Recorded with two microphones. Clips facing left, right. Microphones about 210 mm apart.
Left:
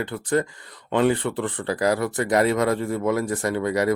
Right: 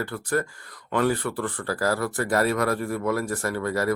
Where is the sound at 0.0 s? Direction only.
20° left (ahead or behind).